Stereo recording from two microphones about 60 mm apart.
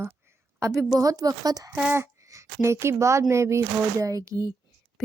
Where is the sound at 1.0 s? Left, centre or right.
Right.